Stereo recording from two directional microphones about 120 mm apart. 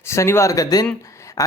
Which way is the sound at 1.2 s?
25° left (ahead or behind).